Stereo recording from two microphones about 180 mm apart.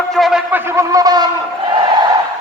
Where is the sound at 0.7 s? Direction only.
20° right (ahead or behind).